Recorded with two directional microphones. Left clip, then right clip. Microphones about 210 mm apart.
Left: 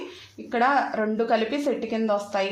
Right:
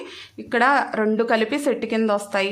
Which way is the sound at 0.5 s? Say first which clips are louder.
Right 3 dB; 35° right (ahead or behind).